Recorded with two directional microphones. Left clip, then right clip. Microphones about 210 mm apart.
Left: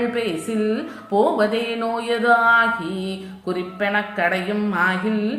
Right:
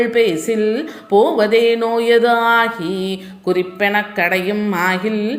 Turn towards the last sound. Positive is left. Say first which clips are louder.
# right 4 dB
turn(degrees=-35)  # may be behind; listen again after turning